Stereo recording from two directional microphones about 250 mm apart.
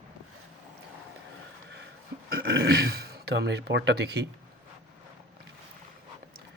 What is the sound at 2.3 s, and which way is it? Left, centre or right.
Speech, right.